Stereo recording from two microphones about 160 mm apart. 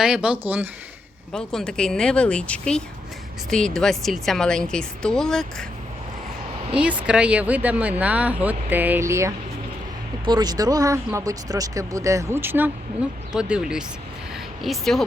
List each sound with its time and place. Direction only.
0.0 s speech: 5° right (ahead or behind)
1.3 s a woman's voice: 5° left (ahead or behind)
6.7 s a woman's voice: 10° right (ahead or behind)
14.3 s a sound: centre (ahead or behind)